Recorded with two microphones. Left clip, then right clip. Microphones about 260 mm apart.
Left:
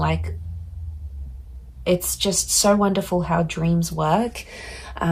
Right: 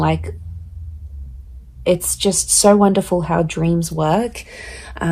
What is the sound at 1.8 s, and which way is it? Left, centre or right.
Speech, right.